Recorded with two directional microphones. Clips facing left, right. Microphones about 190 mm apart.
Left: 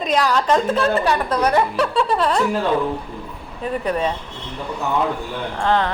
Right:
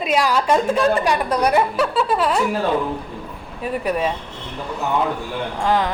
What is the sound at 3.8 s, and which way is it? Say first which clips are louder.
Speech: even; 10° right (ahead or behind).